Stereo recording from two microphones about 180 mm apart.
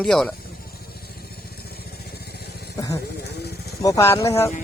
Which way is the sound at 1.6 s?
60° left (ahead or behind).